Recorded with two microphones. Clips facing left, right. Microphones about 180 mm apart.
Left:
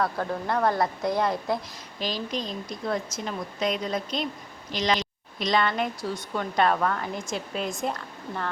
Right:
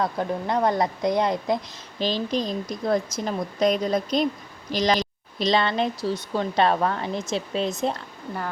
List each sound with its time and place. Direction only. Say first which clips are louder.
0.0 s a woman's voice: right 2 dB; 20° right (ahead or behind)